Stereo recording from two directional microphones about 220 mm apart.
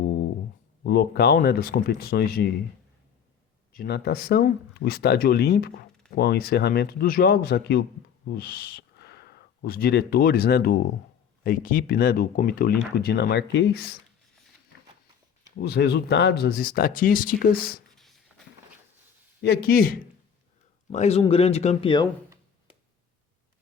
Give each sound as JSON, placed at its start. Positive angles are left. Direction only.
{"t": 0.9, "sound": "speech", "side_deg": 45}
{"t": 3.7, "sound": "speech", "side_deg": 45}
{"t": 15.5, "sound": "speech", "side_deg": 45}
{"t": 17.9, "sound": "a sound", "side_deg": 0}
{"t": 19.4, "sound": "speech", "side_deg": 45}
{"t": 20.9, "sound": "speech", "side_deg": 30}